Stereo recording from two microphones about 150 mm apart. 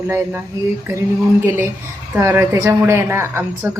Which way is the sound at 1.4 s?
15° right (ahead or behind).